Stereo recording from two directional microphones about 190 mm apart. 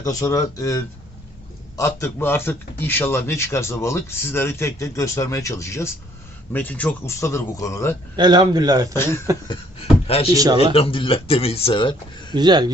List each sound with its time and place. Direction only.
0.0 s speech: 20° left (ahead or behind)
8.1 s speech: 25° right (ahead or behind)
8.9 s speech: 15° left (ahead or behind)
10.1 s speech: 30° left (ahead or behind)
10.3 s speech: 20° right (ahead or behind)
10.6 s speech: 30° left (ahead or behind)
12.3 s speech: 20° right (ahead or behind)